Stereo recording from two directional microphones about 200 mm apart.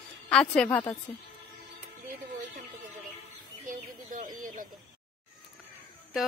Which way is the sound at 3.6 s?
40° right (ahead or behind).